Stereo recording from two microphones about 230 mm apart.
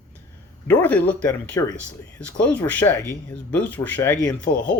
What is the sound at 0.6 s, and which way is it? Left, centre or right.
A man's voice, centre.